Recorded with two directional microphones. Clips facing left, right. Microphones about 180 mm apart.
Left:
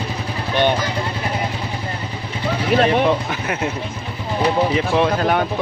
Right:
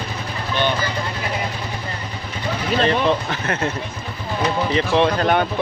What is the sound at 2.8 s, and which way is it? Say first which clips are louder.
Speech: even; 10° left (ahead or behind).